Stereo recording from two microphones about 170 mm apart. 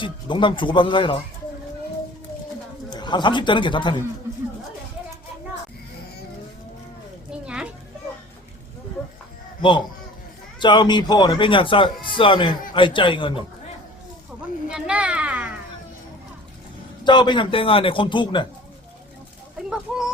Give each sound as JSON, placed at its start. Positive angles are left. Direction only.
{"t": 0.0, "sound": "speech", "side_deg": 30}
{"t": 2.9, "sound": "speech", "side_deg": 25}
{"t": 7.3, "sound": "a sound", "side_deg": -5}
{"t": 9.6, "sound": "speech", "side_deg": 30}
{"t": 14.7, "sound": "a sound", "side_deg": -5}
{"t": 17.0, "sound": "speech", "side_deg": 25}